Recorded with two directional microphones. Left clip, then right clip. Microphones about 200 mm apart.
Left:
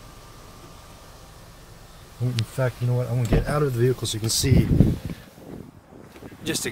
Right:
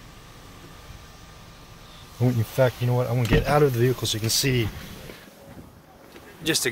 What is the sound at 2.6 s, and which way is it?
Speech, 20° right (ahead or behind).